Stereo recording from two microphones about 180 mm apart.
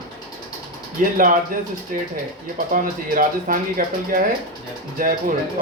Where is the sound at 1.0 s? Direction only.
50° right (ahead or behind).